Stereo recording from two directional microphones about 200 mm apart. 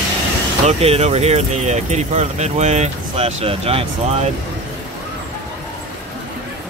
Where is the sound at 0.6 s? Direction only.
30° right (ahead or behind).